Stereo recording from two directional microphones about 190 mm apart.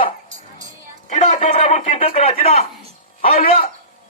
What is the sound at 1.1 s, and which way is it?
A man's voice, 40° left (ahead or behind).